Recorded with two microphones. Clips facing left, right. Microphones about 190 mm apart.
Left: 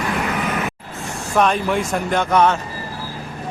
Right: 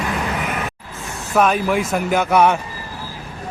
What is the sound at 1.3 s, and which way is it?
Speech, 5° right (ahead or behind).